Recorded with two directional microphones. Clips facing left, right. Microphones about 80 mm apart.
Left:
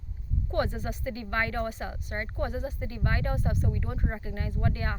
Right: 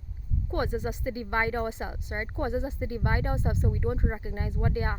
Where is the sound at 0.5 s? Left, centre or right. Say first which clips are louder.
Even; centre.